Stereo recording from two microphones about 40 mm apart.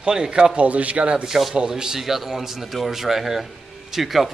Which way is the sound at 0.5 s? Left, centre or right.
Right.